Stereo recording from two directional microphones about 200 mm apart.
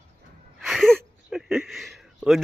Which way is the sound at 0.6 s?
Centre (ahead or behind).